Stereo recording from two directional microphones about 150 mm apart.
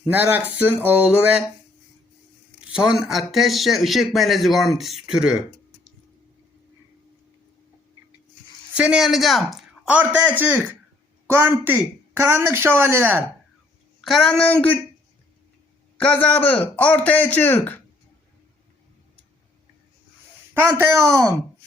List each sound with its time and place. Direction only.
0.0 s a man's voice: 10° right (ahead or behind)
2.7 s speech: 5° right (ahead or behind)
8.7 s a man's voice: 5° right (ahead or behind)
14.0 s a man's voice: centre (ahead or behind)
16.0 s a man's voice: 10° left (ahead or behind)
20.5 s speech: 15° right (ahead or behind)